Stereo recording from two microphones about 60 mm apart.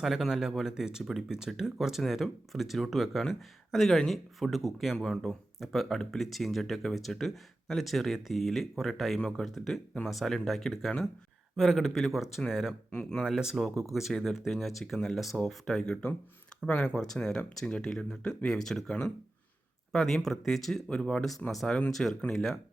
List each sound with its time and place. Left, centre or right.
0.0 s speech: centre
15.8 s speech: centre
19.9 s speech: centre